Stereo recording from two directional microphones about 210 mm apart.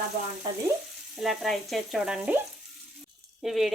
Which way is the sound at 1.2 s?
Centre (ahead or behind).